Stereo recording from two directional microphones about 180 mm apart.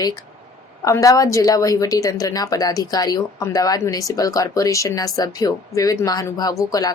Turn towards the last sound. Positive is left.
turn(degrees=20)  # may be behind; listen again after turning